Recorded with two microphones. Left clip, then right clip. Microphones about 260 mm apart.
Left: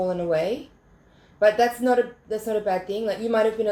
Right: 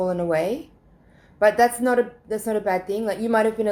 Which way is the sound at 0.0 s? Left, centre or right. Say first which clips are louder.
Right 1 dB; right.